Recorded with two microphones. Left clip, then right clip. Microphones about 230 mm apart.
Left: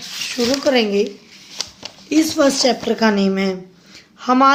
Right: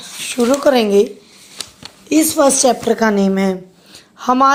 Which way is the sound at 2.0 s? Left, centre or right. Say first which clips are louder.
Right 3 dB; right.